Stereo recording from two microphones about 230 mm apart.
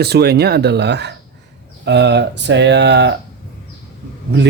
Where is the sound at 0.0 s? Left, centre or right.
Right.